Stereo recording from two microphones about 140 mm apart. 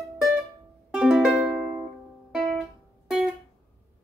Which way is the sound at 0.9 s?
5° right (ahead or behind).